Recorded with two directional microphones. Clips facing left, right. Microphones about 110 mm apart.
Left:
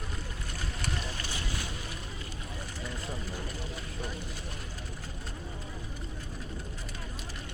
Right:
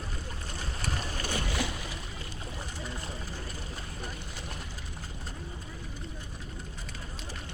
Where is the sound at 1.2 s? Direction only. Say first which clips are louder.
Right 6 dB; 55° right (ahead or behind).